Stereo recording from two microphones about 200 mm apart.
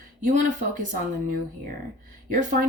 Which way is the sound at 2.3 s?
45° right (ahead or behind).